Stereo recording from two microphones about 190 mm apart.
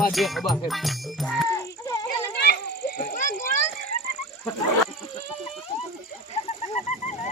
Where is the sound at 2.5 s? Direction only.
50° left (ahead or behind).